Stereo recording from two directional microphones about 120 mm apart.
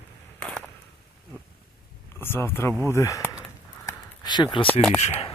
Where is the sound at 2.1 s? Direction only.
20° left (ahead or behind).